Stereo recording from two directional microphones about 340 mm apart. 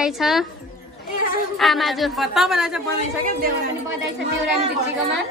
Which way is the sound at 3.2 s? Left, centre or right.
Right.